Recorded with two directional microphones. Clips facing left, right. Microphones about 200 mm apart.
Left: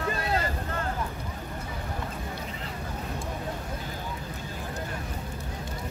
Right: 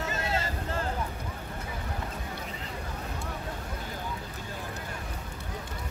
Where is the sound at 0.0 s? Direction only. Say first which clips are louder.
Left 3 dB; 25° right (ahead or behind).